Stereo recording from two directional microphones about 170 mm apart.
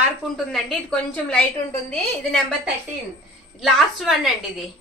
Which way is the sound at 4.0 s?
5° right (ahead or behind).